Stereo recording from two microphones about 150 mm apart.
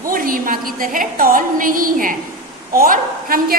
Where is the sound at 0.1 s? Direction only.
70° right (ahead or behind).